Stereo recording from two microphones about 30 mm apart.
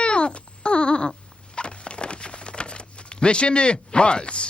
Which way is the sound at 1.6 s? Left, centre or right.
Left.